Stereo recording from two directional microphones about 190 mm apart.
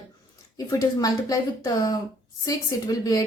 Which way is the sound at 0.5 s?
20° left (ahead or behind).